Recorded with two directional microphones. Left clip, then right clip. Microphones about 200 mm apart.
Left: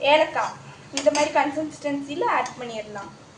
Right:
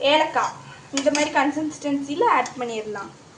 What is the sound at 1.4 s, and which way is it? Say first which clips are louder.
Speech: right 1 dB; 45° right (ahead or behind).